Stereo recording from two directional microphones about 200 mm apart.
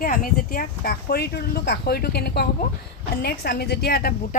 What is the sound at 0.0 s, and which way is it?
A woman's voice, 45° left (ahead or behind).